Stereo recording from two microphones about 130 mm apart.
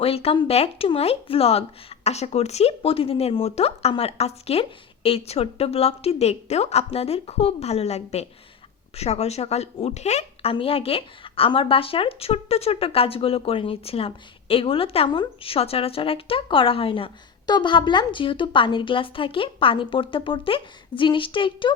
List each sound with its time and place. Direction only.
0.0 s speech: 50° left (ahead or behind)